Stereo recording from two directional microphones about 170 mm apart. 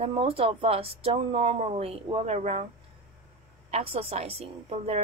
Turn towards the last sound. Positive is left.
turn(degrees=-35)  # may be behind; listen again after turning